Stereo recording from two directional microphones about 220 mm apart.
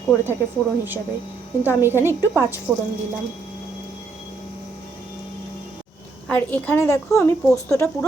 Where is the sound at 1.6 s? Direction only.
10° right (ahead or behind).